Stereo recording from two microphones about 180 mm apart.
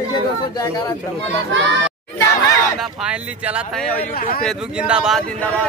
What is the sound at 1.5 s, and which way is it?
Speech, 85° right.